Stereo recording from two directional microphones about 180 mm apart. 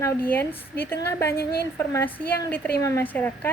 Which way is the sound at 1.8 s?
15° left (ahead or behind).